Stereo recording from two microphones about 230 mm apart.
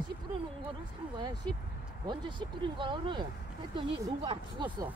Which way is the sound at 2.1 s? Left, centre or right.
Centre.